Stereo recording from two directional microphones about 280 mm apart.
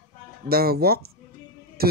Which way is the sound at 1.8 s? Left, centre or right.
Right.